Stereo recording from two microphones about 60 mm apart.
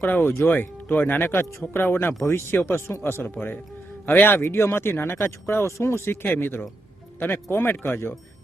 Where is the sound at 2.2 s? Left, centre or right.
Left.